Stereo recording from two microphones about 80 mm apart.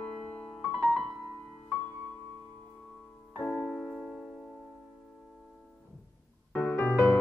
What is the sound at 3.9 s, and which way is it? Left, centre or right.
Music, centre.